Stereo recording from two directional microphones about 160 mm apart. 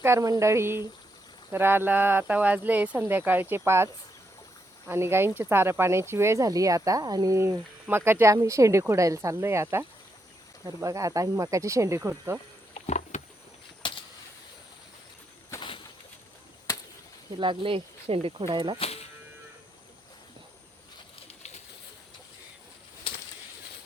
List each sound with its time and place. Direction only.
0.0 s speech: 20° right (ahead or behind)
4.9 s speech: 15° right (ahead or behind)
12.8 s rowboat: 45° left (ahead or behind)
13.8 s a sound: 30° left (ahead or behind)
15.5 s bird: 15° left (ahead or behind)
17.4 s speech: 30° right (ahead or behind)